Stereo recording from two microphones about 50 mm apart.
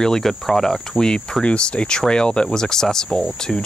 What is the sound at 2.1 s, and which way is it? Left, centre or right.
Cricket, centre.